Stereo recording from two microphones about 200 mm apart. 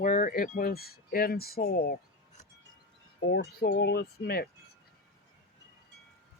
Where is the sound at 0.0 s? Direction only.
45° left (ahead or behind).